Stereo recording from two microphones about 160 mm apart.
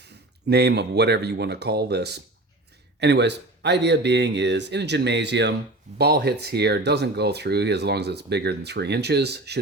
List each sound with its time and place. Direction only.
0.0 s speech: 90° right